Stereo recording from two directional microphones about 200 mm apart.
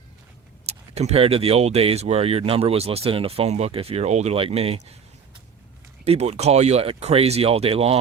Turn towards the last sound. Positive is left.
turn(degrees=-30)  # may be behind; listen again after turning